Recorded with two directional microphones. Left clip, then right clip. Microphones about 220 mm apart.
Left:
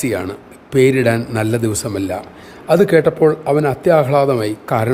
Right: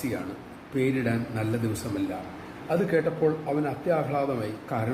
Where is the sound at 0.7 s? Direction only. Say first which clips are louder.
Left 14 dB; 45° left (ahead or behind).